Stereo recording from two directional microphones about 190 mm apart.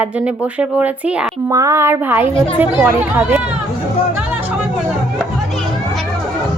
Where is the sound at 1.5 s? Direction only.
15° right (ahead or behind).